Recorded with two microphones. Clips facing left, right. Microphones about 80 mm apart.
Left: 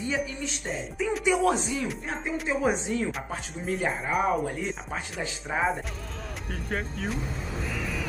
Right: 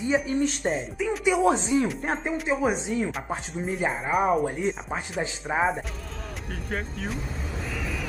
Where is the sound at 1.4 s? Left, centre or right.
Right.